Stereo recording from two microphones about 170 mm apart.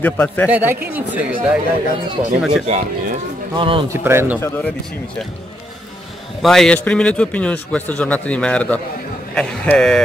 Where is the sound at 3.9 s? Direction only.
15° right (ahead or behind).